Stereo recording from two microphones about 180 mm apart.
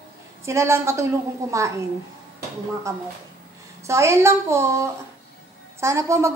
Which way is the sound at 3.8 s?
15° right (ahead or behind).